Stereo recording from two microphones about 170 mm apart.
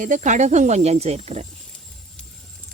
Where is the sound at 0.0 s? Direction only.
45° right (ahead or behind).